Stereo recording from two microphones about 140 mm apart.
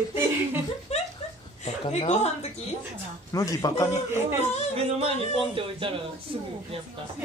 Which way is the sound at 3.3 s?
25° left (ahead or behind).